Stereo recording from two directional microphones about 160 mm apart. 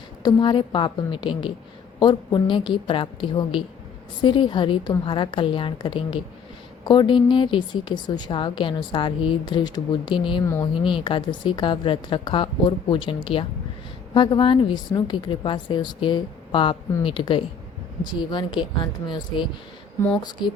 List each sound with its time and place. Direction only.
0.2 s a woman's voice: 30° left (ahead or behind)
10.4 s a woman's voice: 20° left (ahead or behind)
10.8 s a woman's voice: 30° left (ahead or behind)